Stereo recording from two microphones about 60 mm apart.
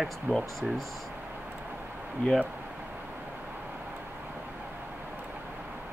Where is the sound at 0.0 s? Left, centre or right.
Centre.